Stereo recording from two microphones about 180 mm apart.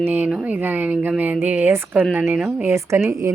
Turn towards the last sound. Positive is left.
turn(degrees=-15)  # may be behind; listen again after turning